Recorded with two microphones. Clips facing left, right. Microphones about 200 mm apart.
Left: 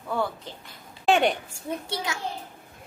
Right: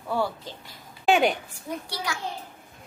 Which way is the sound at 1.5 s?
25° left (ahead or behind).